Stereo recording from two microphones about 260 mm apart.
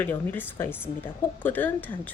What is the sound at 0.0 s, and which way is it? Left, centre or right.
Speech, centre.